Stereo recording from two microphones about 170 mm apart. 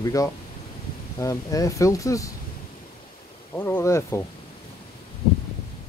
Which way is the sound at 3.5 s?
10° left (ahead or behind).